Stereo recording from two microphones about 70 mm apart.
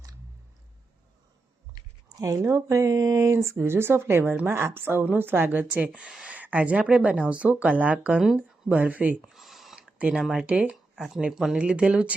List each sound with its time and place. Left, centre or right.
2.1 s speech: right
9.3 s a sound: centre
9.7 s speech: centre